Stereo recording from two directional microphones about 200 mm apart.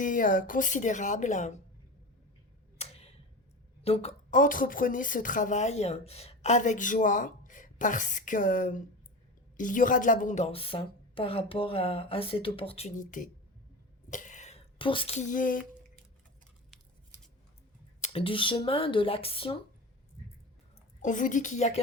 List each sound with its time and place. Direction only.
0.0 s speech: 40° left (ahead or behind)
2.7 s tick-tock: 30° left (ahead or behind)
3.8 s a woman's voice: 30° left (ahead or behind)
18.0 s a woman's voice: 30° left (ahead or behind)
21.0 s speech: 40° left (ahead or behind)